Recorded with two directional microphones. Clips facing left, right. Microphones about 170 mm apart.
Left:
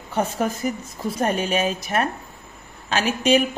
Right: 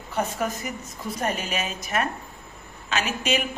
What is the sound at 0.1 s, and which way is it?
Speech, 35° left (ahead or behind).